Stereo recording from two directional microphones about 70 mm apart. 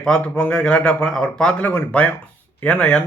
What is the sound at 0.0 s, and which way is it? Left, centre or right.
Speech, centre.